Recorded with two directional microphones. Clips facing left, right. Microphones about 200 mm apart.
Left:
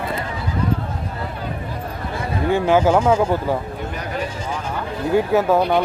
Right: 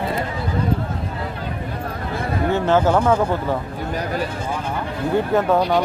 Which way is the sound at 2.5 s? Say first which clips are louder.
Left 2 dB; 10° left (ahead or behind).